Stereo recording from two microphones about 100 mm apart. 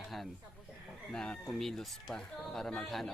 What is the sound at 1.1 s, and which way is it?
A woman's voice, 5° left (ahead or behind).